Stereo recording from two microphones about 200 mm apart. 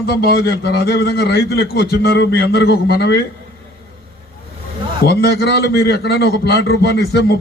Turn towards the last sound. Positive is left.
turn(degrees=55)  # may be behind; listen again after turning